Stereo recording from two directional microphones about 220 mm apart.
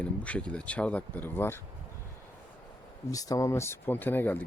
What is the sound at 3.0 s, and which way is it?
Speech, 15° left (ahead or behind).